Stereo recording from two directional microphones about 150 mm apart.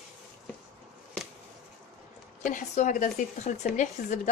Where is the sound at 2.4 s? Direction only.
55° left (ahead or behind).